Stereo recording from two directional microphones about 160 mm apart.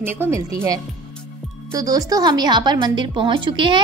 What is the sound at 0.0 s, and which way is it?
A woman's voice, 15° right (ahead or behind).